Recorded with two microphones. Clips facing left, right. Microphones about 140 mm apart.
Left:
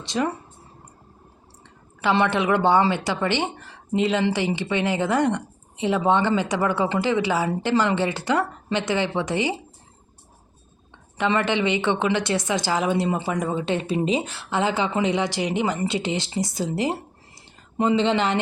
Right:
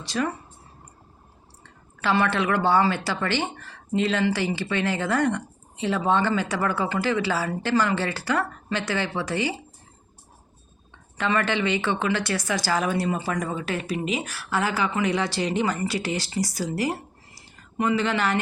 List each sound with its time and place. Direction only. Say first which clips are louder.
0.0 s speech: left 2 dB; 20° left (ahead or behind)
2.0 s speech: left 2 dB; 20° left (ahead or behind)
11.2 s speech: left 2 dB; 20° left (ahead or behind)